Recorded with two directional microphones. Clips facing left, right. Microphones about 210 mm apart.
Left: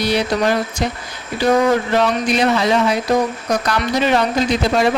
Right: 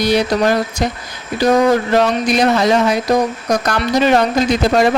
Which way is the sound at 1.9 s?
40° right (ahead or behind).